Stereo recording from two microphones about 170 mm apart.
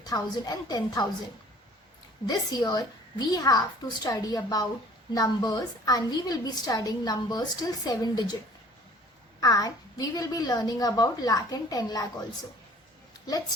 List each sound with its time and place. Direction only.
0.0 s a woman's voice: 20° left (ahead or behind)
2.2 s a woman's voice: 25° left (ahead or behind)
9.4 s a woman's voice: 20° left (ahead or behind)